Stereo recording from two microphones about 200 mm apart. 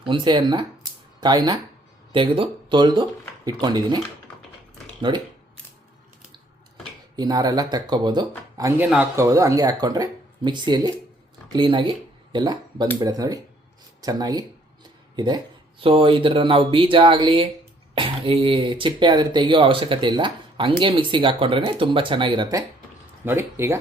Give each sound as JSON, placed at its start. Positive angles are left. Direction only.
{"t": 0.0, "sound": "speech", "side_deg": -25}
{"t": 5.0, "sound": "speech", "side_deg": -20}
{"t": 7.2, "sound": "speech", "side_deg": -20}